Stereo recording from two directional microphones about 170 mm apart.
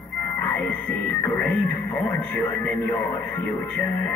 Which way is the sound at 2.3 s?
10° left (ahead or behind).